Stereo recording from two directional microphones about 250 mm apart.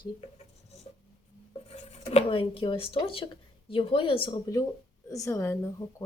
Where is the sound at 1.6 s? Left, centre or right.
Left.